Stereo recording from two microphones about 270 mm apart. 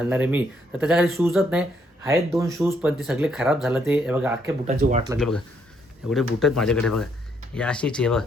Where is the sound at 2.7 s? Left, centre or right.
Centre.